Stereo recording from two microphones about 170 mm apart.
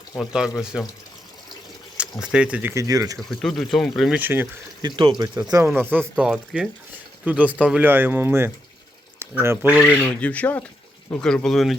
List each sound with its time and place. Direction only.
0.2 s speech: centre (ahead or behind)
2.2 s speech: 5° right (ahead or behind); by 3.2 s 20° right (ahead or behind)
3.2 s speech: centre (ahead or behind)
4.2 s speech: 10° right (ahead or behind)
4.8 s speech: 25° right (ahead or behind)
6.1 s speech: 5° right (ahead or behind)
9.9 s speech: 10° left (ahead or behind)